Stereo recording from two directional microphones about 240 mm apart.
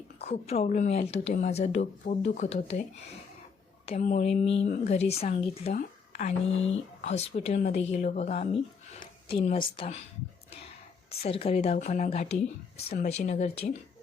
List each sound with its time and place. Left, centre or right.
0.3 s speech: left
3.8 s speech: left
11.2 s speech: left